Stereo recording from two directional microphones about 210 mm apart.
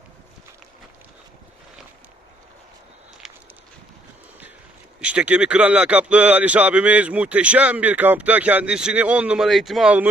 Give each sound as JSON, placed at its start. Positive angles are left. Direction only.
{"t": 3.2, "sound": "walk", "side_deg": 0}
{"t": 4.9, "sound": "speech", "side_deg": -5}